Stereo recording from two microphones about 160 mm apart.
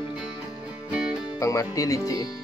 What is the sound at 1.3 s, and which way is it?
Speech, 20° left (ahead or behind).